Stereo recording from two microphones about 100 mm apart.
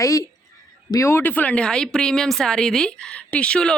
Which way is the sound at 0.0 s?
35° left (ahead or behind).